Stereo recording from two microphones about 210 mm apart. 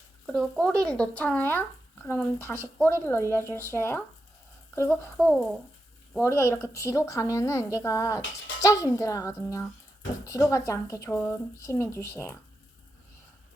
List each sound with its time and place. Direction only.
0.3 s speech: centre (ahead or behind)